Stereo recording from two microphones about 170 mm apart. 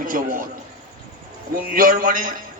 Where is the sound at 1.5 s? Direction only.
55° right (ahead or behind).